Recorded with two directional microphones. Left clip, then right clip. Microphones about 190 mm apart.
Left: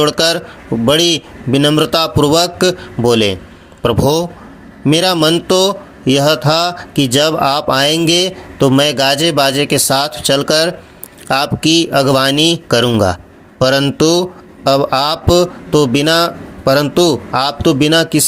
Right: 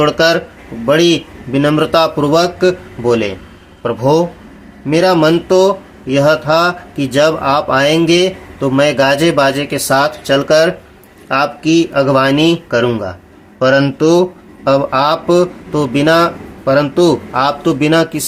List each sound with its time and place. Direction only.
0.0 s speech: 35° left (ahead or behind)